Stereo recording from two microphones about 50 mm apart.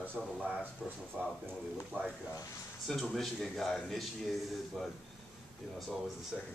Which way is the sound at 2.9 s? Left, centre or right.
Centre.